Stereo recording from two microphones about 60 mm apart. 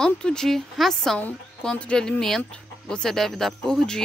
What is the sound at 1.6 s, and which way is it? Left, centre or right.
Speech, centre.